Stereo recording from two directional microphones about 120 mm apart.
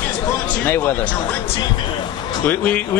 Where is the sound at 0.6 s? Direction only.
20° left (ahead or behind).